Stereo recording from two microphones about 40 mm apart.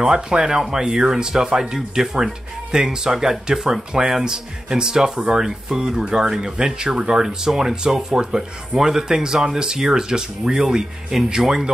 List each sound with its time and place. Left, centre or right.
0.0 s speech: centre